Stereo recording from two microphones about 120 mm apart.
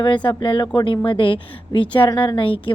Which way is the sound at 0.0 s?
40° left (ahead or behind).